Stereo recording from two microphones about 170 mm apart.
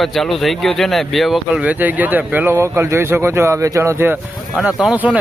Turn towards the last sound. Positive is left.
turn(degrees=-10)  # may be behind; listen again after turning